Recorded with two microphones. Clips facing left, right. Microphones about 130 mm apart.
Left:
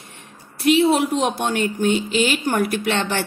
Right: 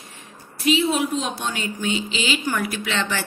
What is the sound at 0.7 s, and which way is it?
A woman's voice, 65° left (ahead or behind).